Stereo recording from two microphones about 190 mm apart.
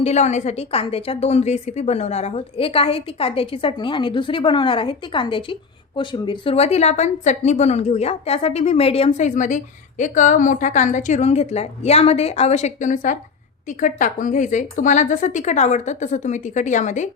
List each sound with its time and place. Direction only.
0.0 s a woman's voice: 35° left (ahead or behind)